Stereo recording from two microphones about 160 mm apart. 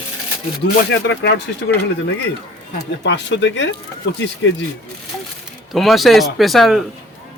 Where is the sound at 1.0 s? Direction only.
90° left.